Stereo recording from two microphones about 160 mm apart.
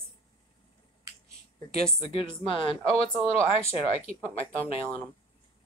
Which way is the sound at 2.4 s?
35° left (ahead or behind).